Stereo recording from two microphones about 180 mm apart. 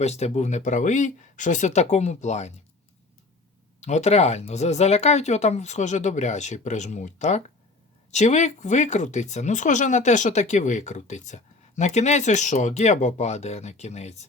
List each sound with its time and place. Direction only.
0.0 s speech: 35° left (ahead or behind)
3.8 s speech: 40° left (ahead or behind)